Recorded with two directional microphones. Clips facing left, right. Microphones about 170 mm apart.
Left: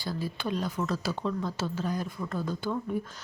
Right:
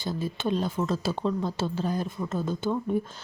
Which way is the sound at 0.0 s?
20° right (ahead or behind).